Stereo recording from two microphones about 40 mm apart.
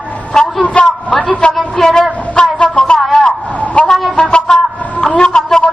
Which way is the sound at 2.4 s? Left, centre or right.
Left.